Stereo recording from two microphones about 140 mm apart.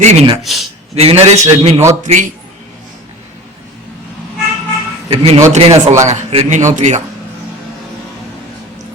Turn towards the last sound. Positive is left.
turn(degrees=-55)  # may be behind; listen again after turning